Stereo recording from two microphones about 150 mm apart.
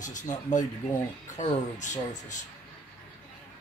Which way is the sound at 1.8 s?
55° left (ahead or behind).